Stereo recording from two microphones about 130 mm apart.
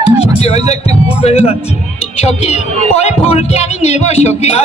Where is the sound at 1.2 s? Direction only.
50° left (ahead or behind).